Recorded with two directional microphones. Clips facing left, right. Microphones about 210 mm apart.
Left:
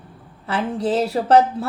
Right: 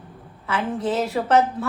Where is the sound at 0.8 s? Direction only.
30° left (ahead or behind).